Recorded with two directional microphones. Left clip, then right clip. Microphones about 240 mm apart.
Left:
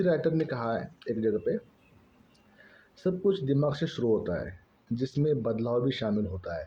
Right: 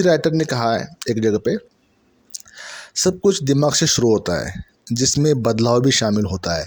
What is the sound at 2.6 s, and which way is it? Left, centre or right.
Speech, right.